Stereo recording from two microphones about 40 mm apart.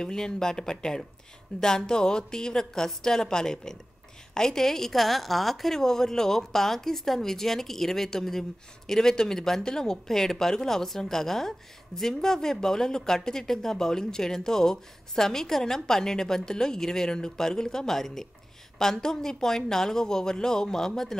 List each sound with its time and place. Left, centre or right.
0.0 s a woman's voice: centre
1.5 s a woman's voice: left; by 21.2 s centre